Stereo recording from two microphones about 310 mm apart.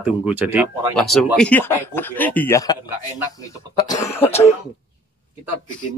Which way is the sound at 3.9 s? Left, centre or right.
Centre.